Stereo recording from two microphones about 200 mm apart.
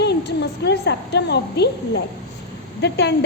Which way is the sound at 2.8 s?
60° left (ahead or behind).